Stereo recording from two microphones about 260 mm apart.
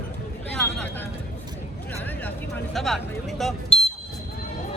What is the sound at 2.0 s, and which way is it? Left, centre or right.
Vehicle, centre.